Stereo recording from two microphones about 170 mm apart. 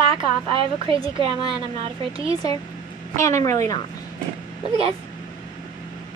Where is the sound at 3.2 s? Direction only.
20° left (ahead or behind).